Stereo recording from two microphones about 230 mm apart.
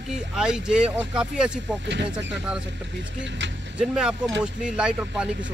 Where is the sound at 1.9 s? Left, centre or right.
Right.